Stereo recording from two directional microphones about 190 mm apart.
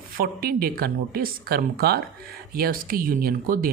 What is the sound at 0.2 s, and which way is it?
Speech, 50° right (ahead or behind).